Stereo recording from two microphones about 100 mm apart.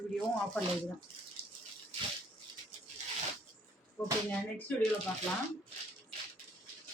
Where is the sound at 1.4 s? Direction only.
70° right (ahead or behind).